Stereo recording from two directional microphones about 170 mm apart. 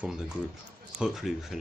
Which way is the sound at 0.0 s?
5° right (ahead or behind).